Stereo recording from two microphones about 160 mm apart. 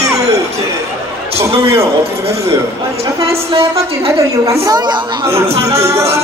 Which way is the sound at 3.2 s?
35° right (ahead or behind).